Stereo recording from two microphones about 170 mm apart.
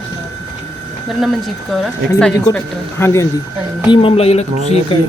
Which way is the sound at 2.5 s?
15° left (ahead or behind).